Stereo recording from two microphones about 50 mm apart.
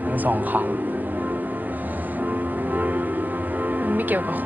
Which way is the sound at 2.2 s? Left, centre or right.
Right.